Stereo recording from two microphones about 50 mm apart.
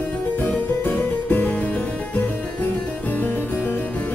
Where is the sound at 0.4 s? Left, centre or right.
Left.